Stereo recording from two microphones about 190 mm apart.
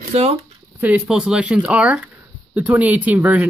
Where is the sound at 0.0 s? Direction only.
35° right (ahead or behind).